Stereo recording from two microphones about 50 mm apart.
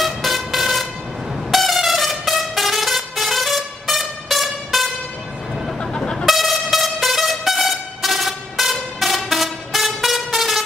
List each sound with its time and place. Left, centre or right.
0.0 s vehicle: centre
1.5 s a sound: centre
5.8 s vehicle horn: centre
6.2 s vehicle horn: centre